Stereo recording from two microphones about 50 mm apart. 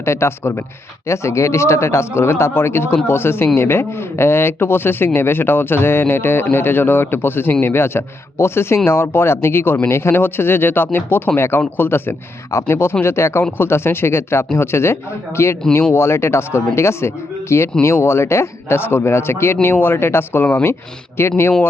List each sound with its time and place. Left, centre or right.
0.0 s speech: left
1.0 s speech: left